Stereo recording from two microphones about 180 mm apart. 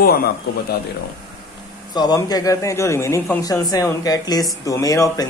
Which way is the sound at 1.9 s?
20° left (ahead or behind).